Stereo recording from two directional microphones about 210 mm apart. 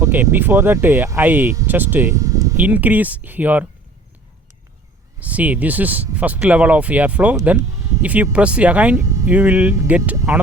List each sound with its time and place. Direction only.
0.0 s speech: 10° right (ahead or behind)
5.2 s speech: 5° right (ahead or behind)